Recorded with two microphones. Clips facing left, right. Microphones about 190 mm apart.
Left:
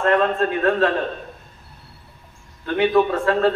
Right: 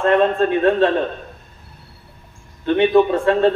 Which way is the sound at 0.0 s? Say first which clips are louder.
Right 3 dB; 25° right (ahead or behind).